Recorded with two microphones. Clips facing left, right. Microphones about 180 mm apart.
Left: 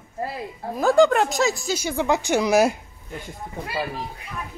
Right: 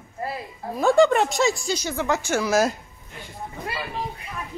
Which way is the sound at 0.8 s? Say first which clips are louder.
Even; centre (ahead or behind).